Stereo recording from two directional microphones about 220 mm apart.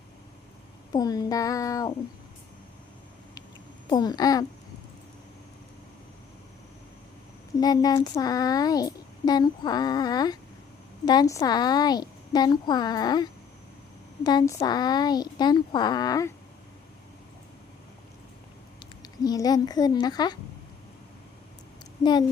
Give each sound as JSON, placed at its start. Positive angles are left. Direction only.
{"t": 0.9, "sound": "speech", "side_deg": 15}
{"t": 3.8, "sound": "speech", "side_deg": 20}
{"t": 7.5, "sound": "a woman's voice", "side_deg": 15}
{"t": 19.0, "sound": "speech", "side_deg": 15}